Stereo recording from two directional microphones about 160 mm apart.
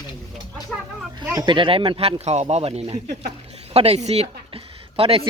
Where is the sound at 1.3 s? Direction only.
30° right (ahead or behind).